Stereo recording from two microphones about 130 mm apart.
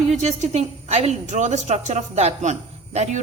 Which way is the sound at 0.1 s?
60° right (ahead or behind).